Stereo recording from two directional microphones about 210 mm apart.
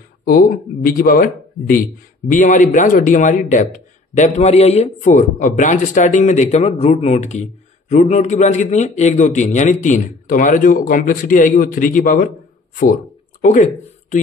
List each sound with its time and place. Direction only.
0.2 s a man's voice: 40° left (ahead or behind)
13.4 s speech: 35° left (ahead or behind)